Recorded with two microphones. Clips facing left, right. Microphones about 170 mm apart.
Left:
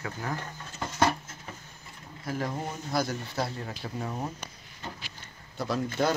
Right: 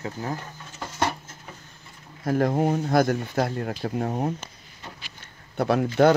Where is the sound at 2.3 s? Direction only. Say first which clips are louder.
Right 11 dB; 55° right (ahead or behind).